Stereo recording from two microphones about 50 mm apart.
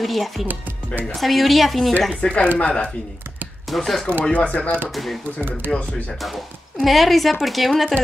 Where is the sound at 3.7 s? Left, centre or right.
Centre.